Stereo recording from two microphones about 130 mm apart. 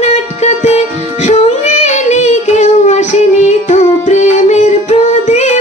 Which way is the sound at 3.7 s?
65° left (ahead or behind).